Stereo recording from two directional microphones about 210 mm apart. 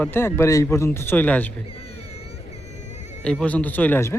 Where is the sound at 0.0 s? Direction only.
10° left (ahead or behind).